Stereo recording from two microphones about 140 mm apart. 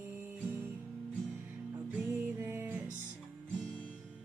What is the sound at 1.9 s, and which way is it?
Music, 15° right (ahead or behind).